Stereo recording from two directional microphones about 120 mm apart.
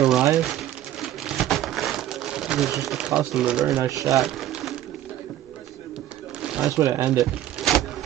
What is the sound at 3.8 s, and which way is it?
Speech, 25° right (ahead or behind).